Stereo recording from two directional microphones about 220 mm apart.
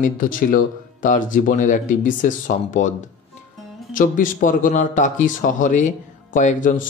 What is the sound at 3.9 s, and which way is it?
A man's voice, 35° left (ahead or behind).